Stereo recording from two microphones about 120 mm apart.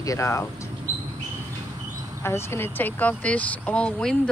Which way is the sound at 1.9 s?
25° right (ahead or behind).